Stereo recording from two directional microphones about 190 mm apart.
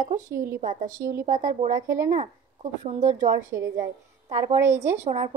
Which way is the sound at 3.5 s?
15° right (ahead or behind).